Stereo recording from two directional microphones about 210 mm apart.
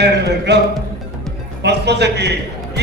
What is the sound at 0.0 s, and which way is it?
Speech, 55° right (ahead or behind).